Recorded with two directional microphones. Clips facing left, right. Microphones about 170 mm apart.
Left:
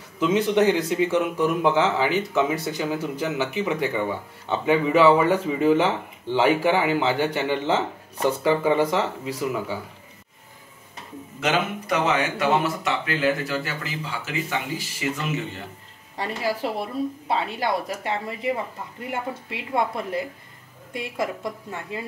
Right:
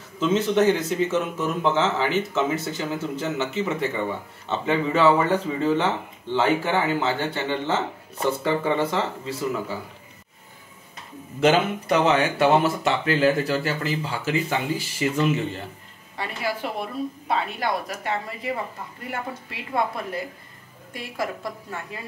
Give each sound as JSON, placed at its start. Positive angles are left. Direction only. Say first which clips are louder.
{"t": 0.2, "sound": "speech", "louder": "even", "side_deg": 15}
{"t": 11.4, "sound": "speech", "louder": "right 5 dB", "side_deg": -30}
{"t": 16.2, "sound": "a woman's voice", "louder": "left 2 dB", "side_deg": 35}